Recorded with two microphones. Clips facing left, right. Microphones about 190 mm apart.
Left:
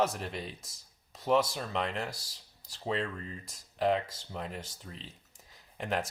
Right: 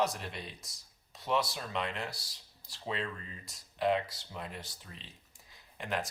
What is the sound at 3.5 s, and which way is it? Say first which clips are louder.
Speech: left 1 dB; 40° left (ahead or behind).